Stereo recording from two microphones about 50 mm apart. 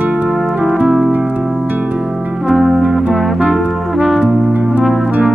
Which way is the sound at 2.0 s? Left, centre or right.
Centre.